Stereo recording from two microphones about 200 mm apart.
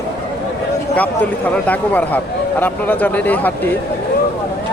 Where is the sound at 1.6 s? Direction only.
10° left (ahead or behind).